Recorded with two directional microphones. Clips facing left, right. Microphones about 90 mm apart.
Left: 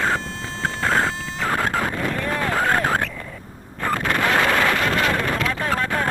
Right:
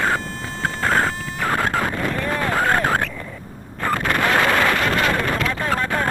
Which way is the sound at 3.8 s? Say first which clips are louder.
Right 1 dB; 55° right (ahead or behind).